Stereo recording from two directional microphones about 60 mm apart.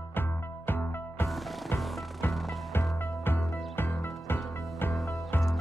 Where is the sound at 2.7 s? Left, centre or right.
Left.